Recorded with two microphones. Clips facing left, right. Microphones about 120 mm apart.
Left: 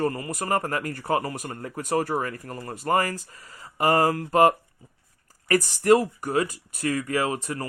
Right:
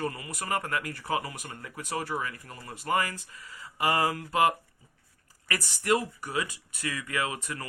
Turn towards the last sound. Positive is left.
turn(degrees=35)  # may be behind; listen again after turning